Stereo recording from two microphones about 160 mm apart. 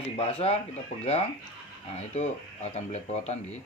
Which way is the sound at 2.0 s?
45° left (ahead or behind).